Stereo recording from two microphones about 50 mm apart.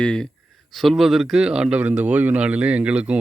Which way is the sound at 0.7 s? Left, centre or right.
Centre.